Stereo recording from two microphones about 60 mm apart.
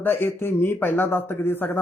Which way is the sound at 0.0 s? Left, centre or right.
Left.